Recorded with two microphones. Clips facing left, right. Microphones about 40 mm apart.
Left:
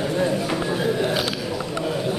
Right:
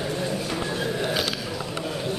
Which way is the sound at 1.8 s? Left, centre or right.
Centre.